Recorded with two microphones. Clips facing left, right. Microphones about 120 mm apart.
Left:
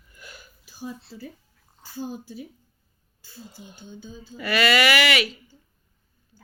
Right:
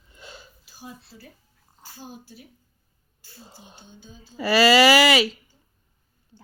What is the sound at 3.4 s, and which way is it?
Speech, 30° right (ahead or behind).